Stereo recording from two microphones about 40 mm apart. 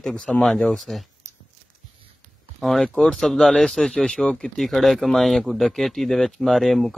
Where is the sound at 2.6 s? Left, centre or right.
Centre; by 4.3 s left.